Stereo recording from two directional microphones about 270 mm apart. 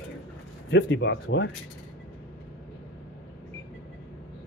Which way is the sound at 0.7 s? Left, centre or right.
Left.